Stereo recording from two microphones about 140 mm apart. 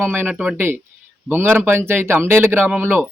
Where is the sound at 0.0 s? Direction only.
15° right (ahead or behind).